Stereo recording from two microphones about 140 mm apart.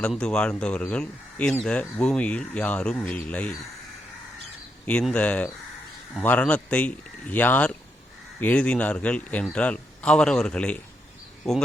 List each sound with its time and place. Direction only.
0.0 s a man's voice: 5° left (ahead or behind)
4.9 s a man's voice: 10° left (ahead or behind)